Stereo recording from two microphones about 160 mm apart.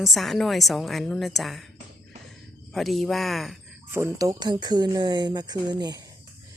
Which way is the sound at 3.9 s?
20° right (ahead or behind).